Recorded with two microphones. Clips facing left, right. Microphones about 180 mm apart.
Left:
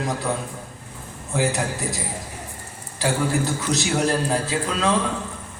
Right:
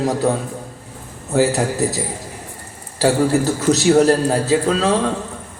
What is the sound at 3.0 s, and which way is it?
A man's voice, 40° right (ahead or behind).